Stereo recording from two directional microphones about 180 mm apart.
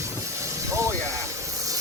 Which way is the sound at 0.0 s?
15° right (ahead or behind).